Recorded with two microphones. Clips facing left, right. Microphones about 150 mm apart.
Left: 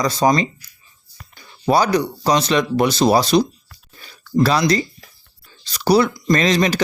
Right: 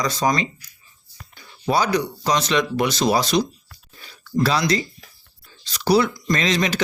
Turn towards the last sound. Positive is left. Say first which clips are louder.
# left 5 dB
turn(degrees=40)  # may be behind; listen again after turning